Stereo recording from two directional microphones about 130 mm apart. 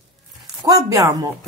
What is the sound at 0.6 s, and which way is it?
Speech, 25° right (ahead or behind).